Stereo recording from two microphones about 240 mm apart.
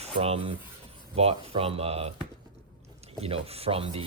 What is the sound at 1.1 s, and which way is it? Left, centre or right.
Speech, right.